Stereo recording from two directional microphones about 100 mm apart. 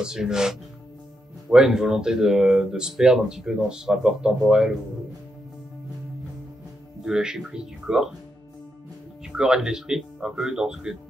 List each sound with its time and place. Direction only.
0.0 s speech: 5° right (ahead or behind)
7.1 s speech: 5° right (ahead or behind)
9.2 s speech: 5° right (ahead or behind)